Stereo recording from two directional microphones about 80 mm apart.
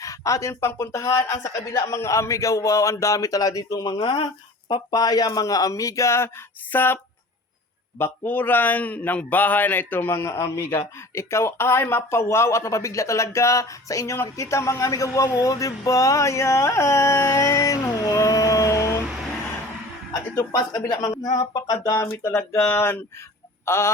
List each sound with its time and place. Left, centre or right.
0.0 s speech: left
4.0 s speech: left
4.7 s a man's voice: left
17.9 s a sound: left
20.5 s speech: left
21.1 s a sound: left
22.0 s speech: left
22.3 s a man's voice: centre
23.6 s chicken: left